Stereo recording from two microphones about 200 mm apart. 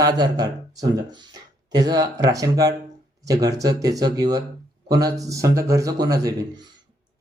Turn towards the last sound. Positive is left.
turn(degrees=-20)  # may be behind; listen again after turning